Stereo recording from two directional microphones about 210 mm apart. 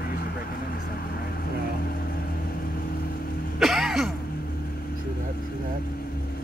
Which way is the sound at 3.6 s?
Centre (ahead or behind).